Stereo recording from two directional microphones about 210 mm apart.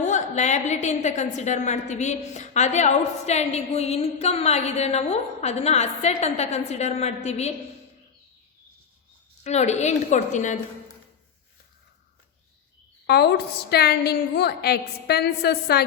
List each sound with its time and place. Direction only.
0.0 s a woman's voice: 35° left (ahead or behind)
9.4 s a woman's voice: 30° left (ahead or behind)
13.1 s a woman's voice: 50° left (ahead or behind)